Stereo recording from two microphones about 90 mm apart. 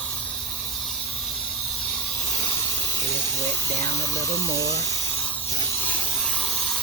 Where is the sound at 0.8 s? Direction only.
Centre (ahead or behind).